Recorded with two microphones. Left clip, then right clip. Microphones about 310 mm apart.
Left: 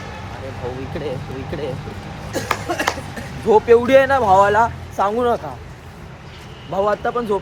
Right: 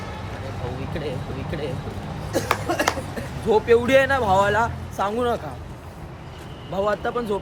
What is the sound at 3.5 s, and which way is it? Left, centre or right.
Speech, centre.